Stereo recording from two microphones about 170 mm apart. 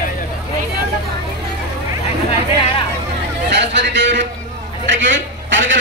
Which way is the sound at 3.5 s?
90° right.